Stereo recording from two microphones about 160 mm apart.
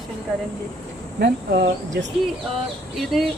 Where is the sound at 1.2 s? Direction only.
90° right.